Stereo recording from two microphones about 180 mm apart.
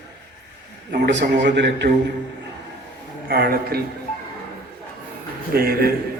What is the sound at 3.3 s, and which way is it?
Speech, 60° right (ahead or behind).